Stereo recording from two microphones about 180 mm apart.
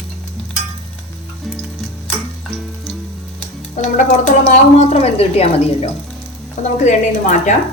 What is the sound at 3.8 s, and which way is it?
A woman's voice, 45° left (ahead or behind).